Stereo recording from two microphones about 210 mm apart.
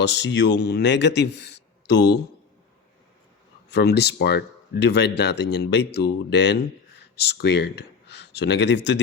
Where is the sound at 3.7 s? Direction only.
50° left (ahead or behind).